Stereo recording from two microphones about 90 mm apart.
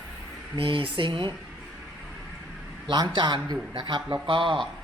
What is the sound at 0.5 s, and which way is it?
Speech, 75° right (ahead or behind).